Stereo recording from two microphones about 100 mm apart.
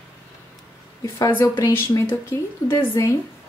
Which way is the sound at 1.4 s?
25° left (ahead or behind).